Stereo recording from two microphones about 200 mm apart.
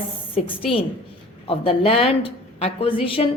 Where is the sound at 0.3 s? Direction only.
30° left (ahead or behind).